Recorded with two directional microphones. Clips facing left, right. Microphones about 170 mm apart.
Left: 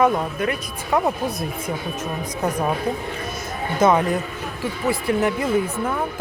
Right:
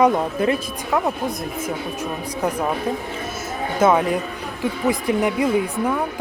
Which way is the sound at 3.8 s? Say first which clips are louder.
Even; 10° right (ahead or behind).